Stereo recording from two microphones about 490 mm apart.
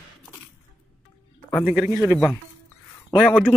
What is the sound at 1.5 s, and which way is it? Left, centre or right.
A man's voice, centre.